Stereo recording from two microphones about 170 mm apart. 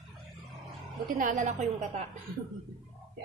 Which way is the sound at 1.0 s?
50° right (ahead or behind).